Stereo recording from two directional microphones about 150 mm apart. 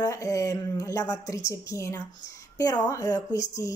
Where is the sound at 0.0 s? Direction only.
20° left (ahead or behind).